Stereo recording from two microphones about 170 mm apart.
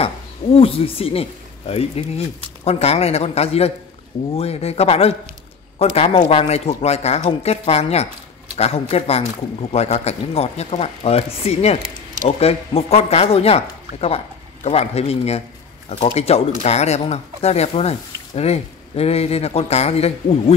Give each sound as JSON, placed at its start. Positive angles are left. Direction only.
{"t": 0.0, "sound": "speech", "side_deg": 35}